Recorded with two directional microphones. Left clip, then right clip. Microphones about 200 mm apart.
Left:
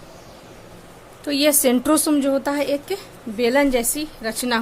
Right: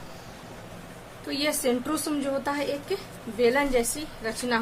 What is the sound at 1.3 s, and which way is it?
A woman's voice, 50° left (ahead or behind).